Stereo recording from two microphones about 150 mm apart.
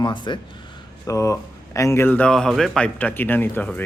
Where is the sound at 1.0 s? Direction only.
20° left (ahead or behind).